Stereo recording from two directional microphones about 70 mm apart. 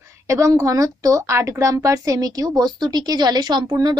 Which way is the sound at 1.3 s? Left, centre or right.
Right.